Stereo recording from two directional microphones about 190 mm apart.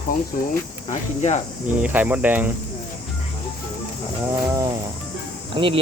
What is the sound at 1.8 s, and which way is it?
Speech, 10° right (ahead or behind).